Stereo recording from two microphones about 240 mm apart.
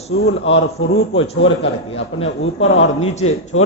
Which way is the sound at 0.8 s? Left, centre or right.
Left.